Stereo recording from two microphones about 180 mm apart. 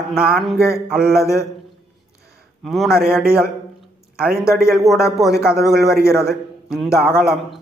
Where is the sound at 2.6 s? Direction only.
Centre (ahead or behind).